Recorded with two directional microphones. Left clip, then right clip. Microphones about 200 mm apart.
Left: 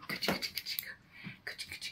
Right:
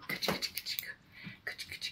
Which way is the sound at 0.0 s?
5° right (ahead or behind).